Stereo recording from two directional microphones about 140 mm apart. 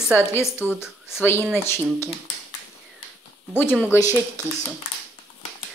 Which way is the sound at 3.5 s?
15° left (ahead or behind).